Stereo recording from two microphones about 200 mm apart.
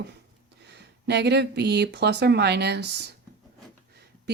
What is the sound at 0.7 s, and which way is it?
Speech, 55° right (ahead or behind).